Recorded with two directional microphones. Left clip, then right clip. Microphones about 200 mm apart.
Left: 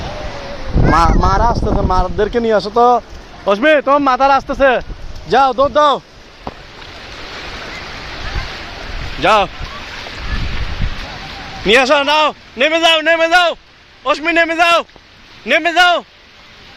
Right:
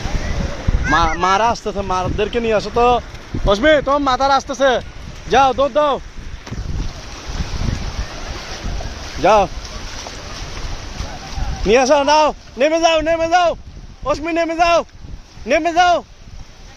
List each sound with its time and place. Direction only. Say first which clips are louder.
0.9 s speech: left 3 dB; 20° left (ahead or behind)
1.2 s speech: left 1 dB; 10° left (ahead or behind)
9.2 s a man's voice: left 1 dB; 10° right (ahead or behind)
11.6 s a man's voice: left 2 dB; 5° right (ahead or behind)